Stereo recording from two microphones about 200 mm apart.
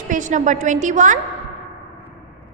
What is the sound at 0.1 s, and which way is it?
A woman's voice, 40° right (ahead or behind).